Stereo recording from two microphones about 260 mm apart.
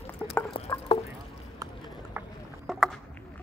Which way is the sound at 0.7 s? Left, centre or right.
Centre.